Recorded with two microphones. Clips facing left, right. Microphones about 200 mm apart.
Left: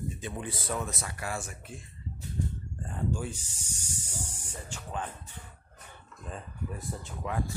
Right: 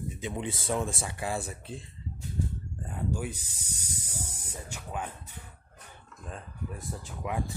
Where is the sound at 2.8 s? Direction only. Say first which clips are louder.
Even; 5° right (ahead or behind).